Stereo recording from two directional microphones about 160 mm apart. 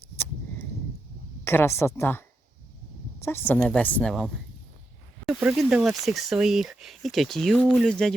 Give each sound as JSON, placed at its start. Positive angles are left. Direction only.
{"t": 1.5, "sound": "a woman's voice", "side_deg": 15}